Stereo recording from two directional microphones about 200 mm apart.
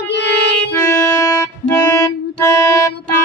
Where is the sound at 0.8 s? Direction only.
10° left (ahead or behind).